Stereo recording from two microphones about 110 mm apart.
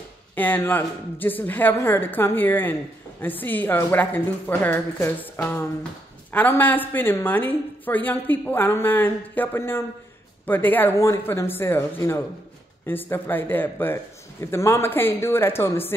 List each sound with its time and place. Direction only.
0.4 s a woman's voice: 15° left (ahead or behind)